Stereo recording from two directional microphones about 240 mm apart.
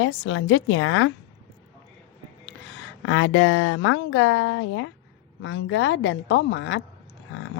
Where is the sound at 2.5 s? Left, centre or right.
Left.